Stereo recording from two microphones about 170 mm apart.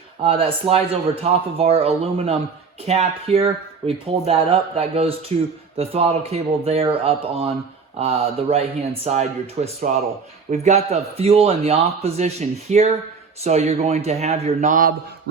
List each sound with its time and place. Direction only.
0.2 s a man's voice: 35° right (ahead or behind); by 14.9 s 50° right (ahead or behind)